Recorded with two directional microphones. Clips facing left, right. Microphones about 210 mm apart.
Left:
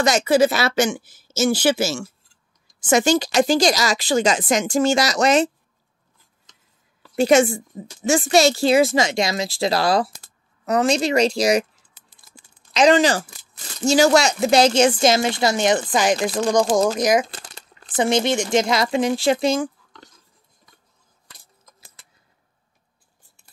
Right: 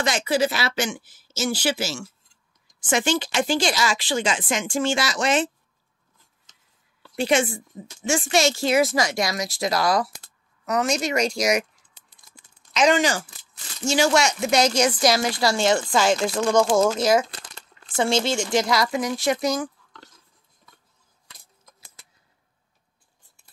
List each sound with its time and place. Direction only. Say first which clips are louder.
0.0 s speech: left 6 dB; 45° left (ahead or behind)
7.2 s a woman's voice: left 6 dB; 40° left (ahead or behind)
12.4 s a sound: left 4 dB; 35° left (ahead or behind)
13.8 s a woman's voice: left 5 dB; 40° left (ahead or behind)